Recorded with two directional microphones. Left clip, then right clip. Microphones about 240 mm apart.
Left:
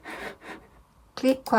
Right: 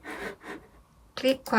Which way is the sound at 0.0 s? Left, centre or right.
Centre.